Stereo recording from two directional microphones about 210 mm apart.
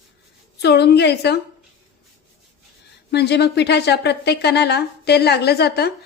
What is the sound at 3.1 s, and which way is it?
Speech, 50° left (ahead or behind).